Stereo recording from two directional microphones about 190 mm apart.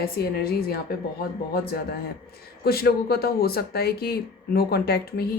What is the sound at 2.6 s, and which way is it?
A woman's voice, 55° left (ahead or behind).